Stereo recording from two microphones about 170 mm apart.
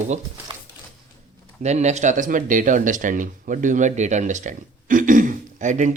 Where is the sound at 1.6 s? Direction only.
40° right (ahead or behind).